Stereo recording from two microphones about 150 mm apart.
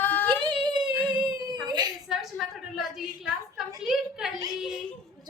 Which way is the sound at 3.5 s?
5° right (ahead or behind).